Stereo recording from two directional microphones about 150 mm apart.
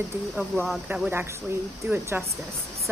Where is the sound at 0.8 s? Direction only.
10° right (ahead or behind).